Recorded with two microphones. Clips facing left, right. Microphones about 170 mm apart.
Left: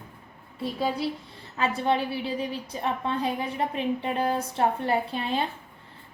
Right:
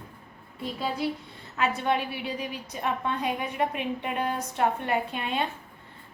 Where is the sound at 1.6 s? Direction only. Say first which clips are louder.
Left 1 dB; 30° left (ahead or behind).